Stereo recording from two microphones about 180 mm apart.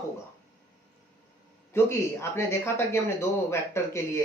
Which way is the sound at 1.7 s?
15° left (ahead or behind).